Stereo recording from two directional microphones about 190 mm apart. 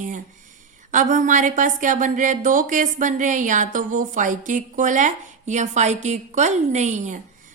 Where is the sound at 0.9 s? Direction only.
40° right (ahead or behind).